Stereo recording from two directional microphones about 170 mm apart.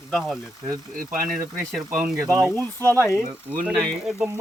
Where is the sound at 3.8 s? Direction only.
5° right (ahead or behind).